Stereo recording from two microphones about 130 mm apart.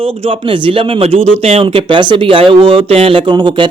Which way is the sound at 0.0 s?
45° right (ahead or behind).